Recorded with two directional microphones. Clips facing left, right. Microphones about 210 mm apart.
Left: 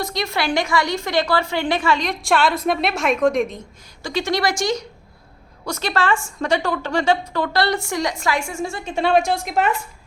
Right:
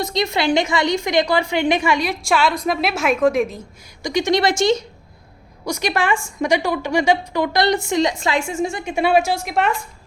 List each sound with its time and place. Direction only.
0.0 s a woman's voice: 20° right (ahead or behind); by 3.6 s 5° right (ahead or behind)
4.0 s a woman's voice: 15° right (ahead or behind)
5.6 s a woman's voice: 10° right (ahead or behind)